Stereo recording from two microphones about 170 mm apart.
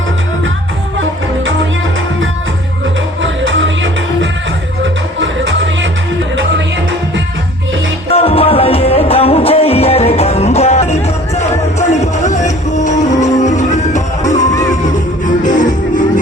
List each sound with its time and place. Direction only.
3.2 s music: 90° right
4.8 s music: 90° right
8.1 s music: 35° left (ahead or behind)
13.1 s music: 20° left (ahead or behind)
13.4 s music: 45° left (ahead or behind)